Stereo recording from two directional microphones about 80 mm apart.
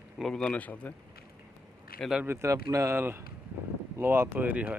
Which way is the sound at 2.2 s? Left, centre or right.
Right.